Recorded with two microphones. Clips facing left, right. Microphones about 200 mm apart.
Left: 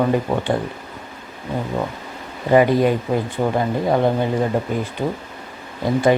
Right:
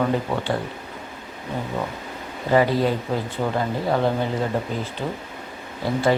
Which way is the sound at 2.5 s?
15° left (ahead or behind).